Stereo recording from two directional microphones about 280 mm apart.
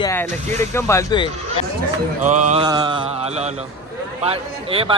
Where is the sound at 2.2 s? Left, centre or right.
Right.